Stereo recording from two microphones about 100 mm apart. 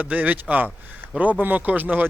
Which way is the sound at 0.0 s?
15° right (ahead or behind).